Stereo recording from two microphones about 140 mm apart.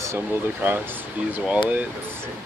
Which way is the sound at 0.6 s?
15° right (ahead or behind).